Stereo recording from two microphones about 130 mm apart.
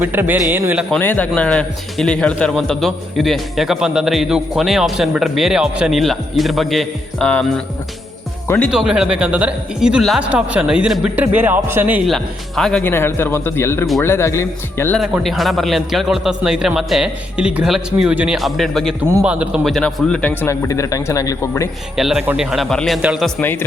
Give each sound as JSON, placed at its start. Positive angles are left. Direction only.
{"t": 0.0, "sound": "a man's voice", "side_deg": -15}
{"t": 0.9, "sound": "a man's voice", "side_deg": 15}
{"t": 8.7, "sound": "a man's voice", "side_deg": -5}
{"t": 12.0, "sound": "a man's voice", "side_deg": 0}
{"t": 12.8, "sound": "speech", "side_deg": 20}
{"t": 15.2, "sound": "a man's voice", "side_deg": 0}
{"t": 19.2, "sound": "a man's voice", "side_deg": -10}
{"t": 19.6, "sound": "speech", "side_deg": 5}
{"t": 21.9, "sound": "a man's voice", "side_deg": 0}
{"t": 23.0, "sound": "a man's voice", "side_deg": -10}
{"t": 23.4, "sound": "a man's voice", "side_deg": 15}